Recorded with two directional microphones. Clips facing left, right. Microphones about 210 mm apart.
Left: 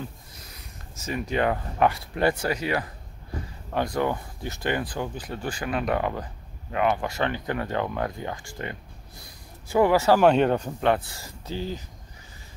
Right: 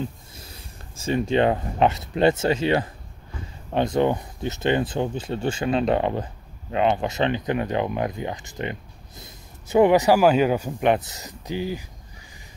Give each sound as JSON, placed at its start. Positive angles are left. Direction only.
{"t": 0.4, "sound": "speech", "side_deg": -30}
{"t": 10.2, "sound": "speech", "side_deg": -5}
{"t": 10.8, "sound": "speech", "side_deg": -20}